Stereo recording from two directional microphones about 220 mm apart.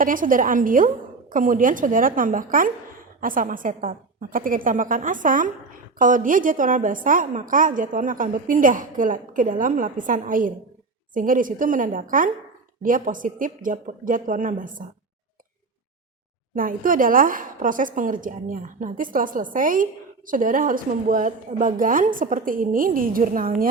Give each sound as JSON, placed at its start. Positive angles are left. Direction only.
{"t": 0.0, "sound": "a woman's voice", "side_deg": -40}
{"t": 16.6, "sound": "a woman's voice", "side_deg": -40}